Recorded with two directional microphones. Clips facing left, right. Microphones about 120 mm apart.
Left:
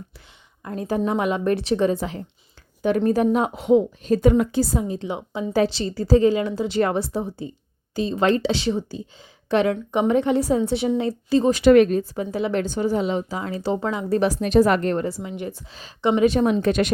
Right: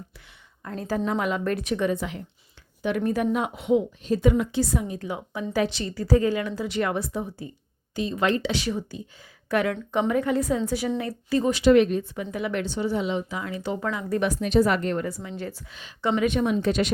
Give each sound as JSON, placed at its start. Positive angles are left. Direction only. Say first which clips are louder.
{"t": 0.6, "sound": "a woman's voice", "louder": "left 4 dB", "side_deg": 20}
{"t": 1.6, "sound": "a woman's voice", "louder": "left 5 dB", "side_deg": 30}
{"t": 4.7, "sound": "a woman's voice", "louder": "left 3 dB", "side_deg": 30}
{"t": 11.5, "sound": "a woman's voice", "louder": "left 3 dB", "side_deg": 50}
{"t": 12.6, "sound": "a woman's voice", "louder": "left 4 dB", "side_deg": 45}
{"t": 16.2, "sound": "speech", "louder": "left 5 dB", "side_deg": 40}